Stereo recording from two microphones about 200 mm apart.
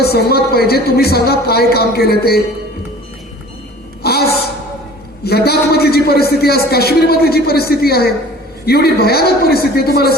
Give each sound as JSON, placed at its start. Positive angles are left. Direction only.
{"t": 0.0, "sound": "a man's voice", "side_deg": 50}
{"t": 4.0, "sound": "a woman's voice", "side_deg": 50}